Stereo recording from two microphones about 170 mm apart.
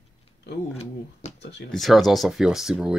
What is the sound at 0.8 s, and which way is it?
Speech, 40° left (ahead or behind).